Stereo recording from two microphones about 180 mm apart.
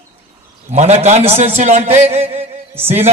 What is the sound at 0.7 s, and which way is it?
A man's voice, 40° right (ahead or behind).